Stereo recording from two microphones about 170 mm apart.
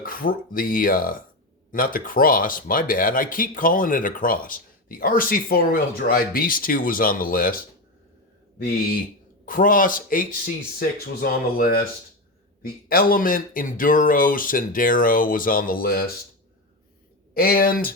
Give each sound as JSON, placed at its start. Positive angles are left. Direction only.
{"t": 0.0, "sound": "speech", "side_deg": 55}
{"t": 9.5, "sound": "speech", "side_deg": 55}
{"t": 17.3, "sound": "speech", "side_deg": 60}